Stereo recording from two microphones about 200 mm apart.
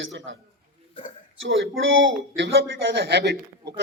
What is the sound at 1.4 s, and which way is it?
Speech, 70° right (ahead or behind).